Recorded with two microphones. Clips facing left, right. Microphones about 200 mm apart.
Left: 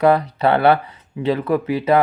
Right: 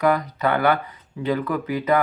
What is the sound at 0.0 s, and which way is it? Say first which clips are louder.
Speech: left 5 dB; 30° left (ahead or behind).